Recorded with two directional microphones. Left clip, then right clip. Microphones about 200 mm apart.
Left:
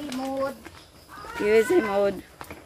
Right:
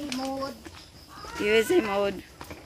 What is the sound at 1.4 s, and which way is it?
Speech, 10° left (ahead or behind).